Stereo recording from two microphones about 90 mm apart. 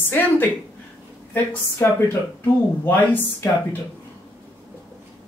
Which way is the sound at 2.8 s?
25° left (ahead or behind).